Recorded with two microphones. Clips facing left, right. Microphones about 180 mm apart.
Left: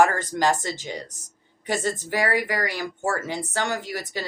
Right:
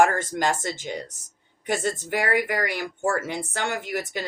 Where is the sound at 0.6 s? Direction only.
55° right (ahead or behind).